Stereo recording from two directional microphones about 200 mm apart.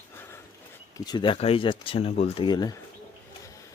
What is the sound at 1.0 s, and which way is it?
Speech, 20° left (ahead or behind).